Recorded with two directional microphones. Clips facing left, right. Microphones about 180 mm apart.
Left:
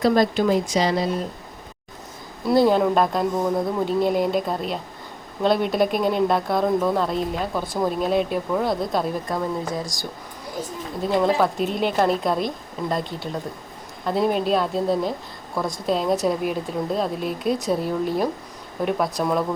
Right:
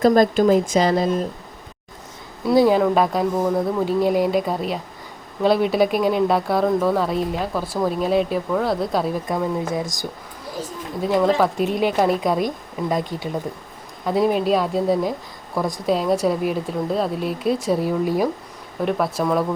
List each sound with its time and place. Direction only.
0.0 s speech: 45° right (ahead or behind)
2.5 s a woman's voice: 5° right (ahead or behind)
9.7 s speech: 20° right (ahead or behind)
11.0 s a woman's voice: 5° right (ahead or behind)
14.0 s a woman's voice: 5° right (ahead or behind)